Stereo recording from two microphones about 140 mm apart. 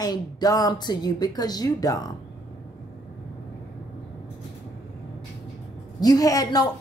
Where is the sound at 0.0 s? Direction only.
30° left (ahead or behind).